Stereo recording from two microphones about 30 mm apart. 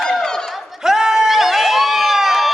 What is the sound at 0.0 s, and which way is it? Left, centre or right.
Chatter, centre.